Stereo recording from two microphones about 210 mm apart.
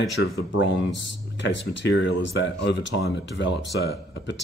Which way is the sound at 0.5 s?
60° left (ahead or behind).